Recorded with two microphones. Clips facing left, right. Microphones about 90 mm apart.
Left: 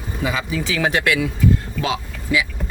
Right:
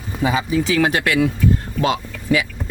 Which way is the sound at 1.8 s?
40° right (ahead or behind).